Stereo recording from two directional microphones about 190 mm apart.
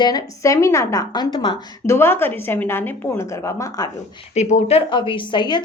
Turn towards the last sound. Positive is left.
turn(degrees=25)  # may be behind; listen again after turning